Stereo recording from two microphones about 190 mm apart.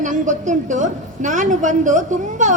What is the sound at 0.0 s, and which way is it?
A woman's voice, 40° right (ahead or behind).